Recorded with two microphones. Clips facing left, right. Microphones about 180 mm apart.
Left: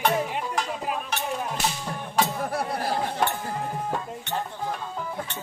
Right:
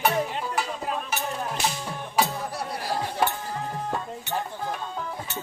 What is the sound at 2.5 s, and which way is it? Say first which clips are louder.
Music: left 4 dB; 55° left (ahead or behind).